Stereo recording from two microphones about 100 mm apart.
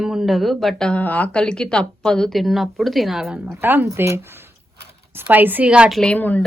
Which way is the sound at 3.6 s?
20° right (ahead or behind).